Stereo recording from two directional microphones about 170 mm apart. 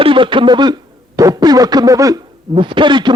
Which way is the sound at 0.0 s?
30° right (ahead or behind).